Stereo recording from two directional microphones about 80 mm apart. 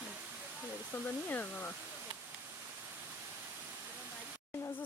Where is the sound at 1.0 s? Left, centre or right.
Centre.